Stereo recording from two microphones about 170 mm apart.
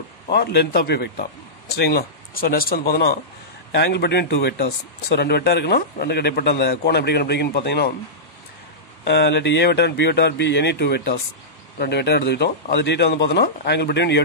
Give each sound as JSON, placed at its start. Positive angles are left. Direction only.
{"t": 0.3, "sound": "speech", "side_deg": 75}
{"t": 3.7, "sound": "speech", "side_deg": 85}
{"t": 9.0, "sound": "speech", "side_deg": 80}